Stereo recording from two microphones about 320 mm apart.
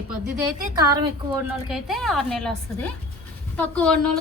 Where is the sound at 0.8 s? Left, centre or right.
Centre.